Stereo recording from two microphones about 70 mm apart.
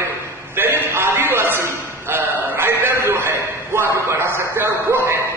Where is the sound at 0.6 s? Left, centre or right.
Right.